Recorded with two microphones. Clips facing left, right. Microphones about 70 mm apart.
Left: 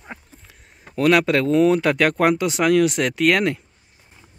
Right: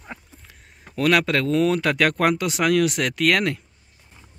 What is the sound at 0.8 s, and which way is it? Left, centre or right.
Speech, centre.